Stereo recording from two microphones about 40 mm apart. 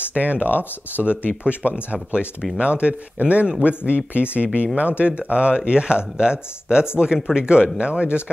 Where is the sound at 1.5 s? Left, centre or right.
Right.